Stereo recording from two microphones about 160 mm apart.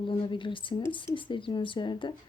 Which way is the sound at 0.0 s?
30° left (ahead or behind).